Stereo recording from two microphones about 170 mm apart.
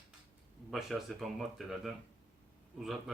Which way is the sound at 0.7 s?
Centre (ahead or behind).